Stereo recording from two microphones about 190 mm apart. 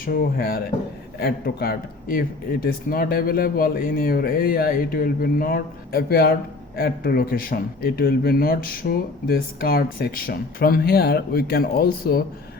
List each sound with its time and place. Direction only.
0.0 s a man's voice: 50° left (ahead or behind)